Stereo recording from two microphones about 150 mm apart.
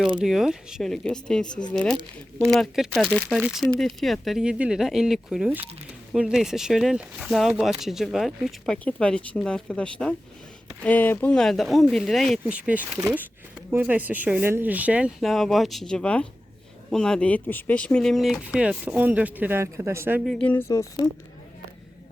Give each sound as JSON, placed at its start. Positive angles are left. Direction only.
{"t": 0.2, "sound": "speech", "side_deg": -5}
{"t": 20.2, "sound": "speech", "side_deg": 5}